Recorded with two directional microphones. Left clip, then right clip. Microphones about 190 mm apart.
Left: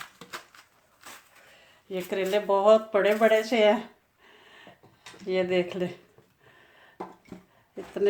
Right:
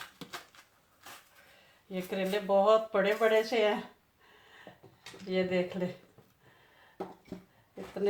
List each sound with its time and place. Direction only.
1.9 s speech: 45° left (ahead or behind)
5.3 s speech: 55° left (ahead or behind)